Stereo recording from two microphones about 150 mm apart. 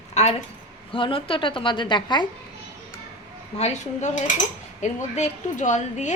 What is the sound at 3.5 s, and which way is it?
Speech, 50° left (ahead or behind).